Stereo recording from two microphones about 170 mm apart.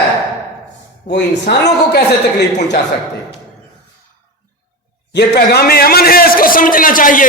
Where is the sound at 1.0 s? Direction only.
90° left.